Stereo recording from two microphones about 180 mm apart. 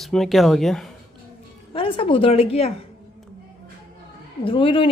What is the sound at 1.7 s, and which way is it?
Speech, 30° left (ahead or behind).